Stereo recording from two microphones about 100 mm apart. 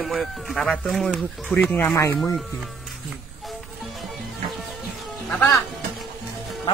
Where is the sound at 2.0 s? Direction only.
30° left (ahead or behind).